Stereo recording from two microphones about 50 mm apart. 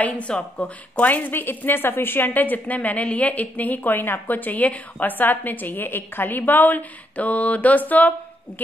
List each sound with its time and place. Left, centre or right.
0.0 s speech: left
1.3 s a woman's voice: left